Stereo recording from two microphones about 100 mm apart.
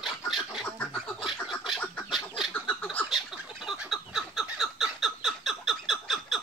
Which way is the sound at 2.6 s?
15° left (ahead or behind).